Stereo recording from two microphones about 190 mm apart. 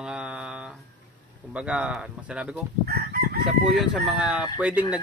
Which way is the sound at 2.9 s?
55° right (ahead or behind).